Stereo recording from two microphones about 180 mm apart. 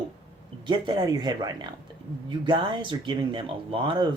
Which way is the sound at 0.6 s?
25° right (ahead or behind).